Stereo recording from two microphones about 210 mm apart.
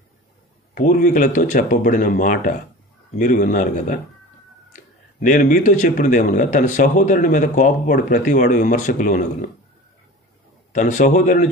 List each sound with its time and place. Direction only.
0.7 s speech: 40° left (ahead or behind)
10.7 s speech: 35° left (ahead or behind)